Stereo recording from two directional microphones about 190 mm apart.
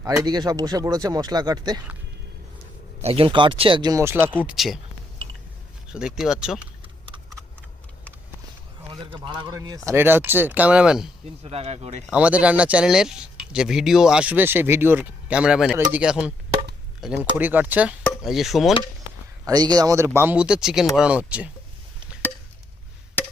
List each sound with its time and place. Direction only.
0.2 s speech: 20° right (ahead or behind)
3.0 s speech: 30° right (ahead or behind); by 4.8 s centre (ahead or behind)
5.9 s speech: 5° right (ahead or behind)
9.1 s speech: 25° right (ahead or behind); by 11.1 s 5° right (ahead or behind)
11.4 s speech: 35° right (ahead or behind)
12.0 s speech: 5° right (ahead or behind)
17.3 s speech: 10° right (ahead or behind)
19.5 s speech: 20° right (ahead or behind)